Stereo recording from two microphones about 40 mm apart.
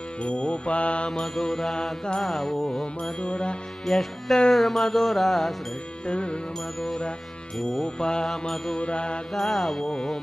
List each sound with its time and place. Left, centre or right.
0.2 s mantra: left
1.2 s music: centre
3.2 s mantra: left
3.8 s music: centre
6.0 s mantra: left
7.8 s mantra: centre
8.3 s music: centre
8.7 s mantra: left
9.3 s music: centre